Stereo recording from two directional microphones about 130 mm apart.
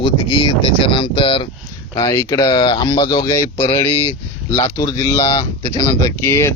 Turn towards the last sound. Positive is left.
turn(degrees=20)  # may be behind; listen again after turning